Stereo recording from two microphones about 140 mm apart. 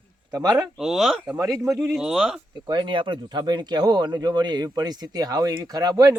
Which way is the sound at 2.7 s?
35° right (ahead or behind).